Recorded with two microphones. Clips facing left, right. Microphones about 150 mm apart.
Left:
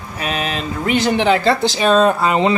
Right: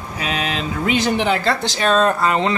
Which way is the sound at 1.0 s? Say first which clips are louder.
Left 5 dB; 10° right (ahead or behind).